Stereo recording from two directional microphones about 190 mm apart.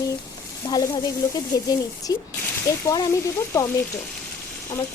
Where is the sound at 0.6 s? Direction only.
20° left (ahead or behind).